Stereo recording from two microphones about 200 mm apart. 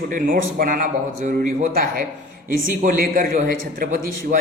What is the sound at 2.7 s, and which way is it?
Speech, 45° right (ahead or behind).